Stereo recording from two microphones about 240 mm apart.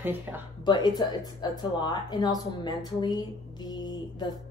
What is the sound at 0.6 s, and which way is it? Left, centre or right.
Speech, centre.